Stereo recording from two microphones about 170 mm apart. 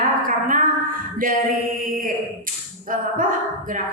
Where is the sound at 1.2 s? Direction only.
55° right (ahead or behind).